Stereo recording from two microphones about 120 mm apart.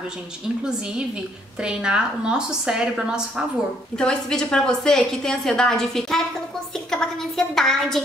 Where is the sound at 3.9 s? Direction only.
5° left (ahead or behind).